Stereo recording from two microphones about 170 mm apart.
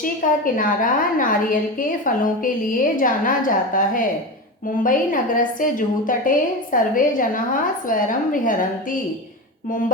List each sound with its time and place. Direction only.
0.0 s a woman's voice: 55° left (ahead or behind)